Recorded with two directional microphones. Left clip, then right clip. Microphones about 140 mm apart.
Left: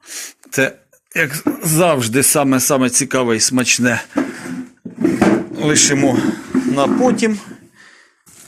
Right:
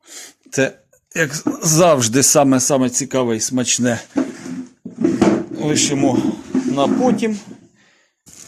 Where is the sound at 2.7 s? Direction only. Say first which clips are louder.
Left 2 dB; 15° right (ahead or behind).